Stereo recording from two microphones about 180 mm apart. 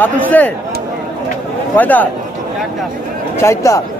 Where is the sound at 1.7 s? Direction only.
10° left (ahead or behind).